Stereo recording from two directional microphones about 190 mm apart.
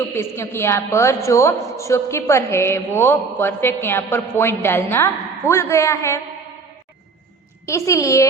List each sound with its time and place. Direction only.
0.1 s a man's voice: 15° left (ahead or behind)
7.7 s a man's voice: 15° left (ahead or behind)